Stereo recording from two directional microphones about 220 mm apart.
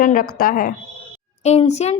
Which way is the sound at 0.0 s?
40° left (ahead or behind).